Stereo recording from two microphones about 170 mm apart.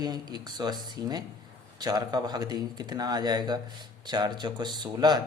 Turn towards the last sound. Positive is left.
turn(degrees=-25)  # may be behind; listen again after turning